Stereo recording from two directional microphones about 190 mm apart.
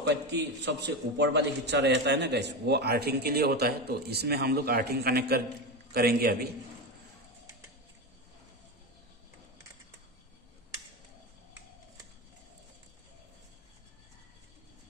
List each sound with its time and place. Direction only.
0.0 s a man's voice: 65° right (ahead or behind)